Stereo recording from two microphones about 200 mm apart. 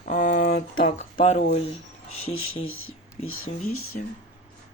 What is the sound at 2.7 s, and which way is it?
Speech, 90° left.